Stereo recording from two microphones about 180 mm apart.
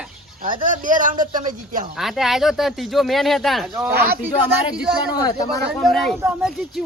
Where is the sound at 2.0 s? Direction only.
Centre (ahead or behind).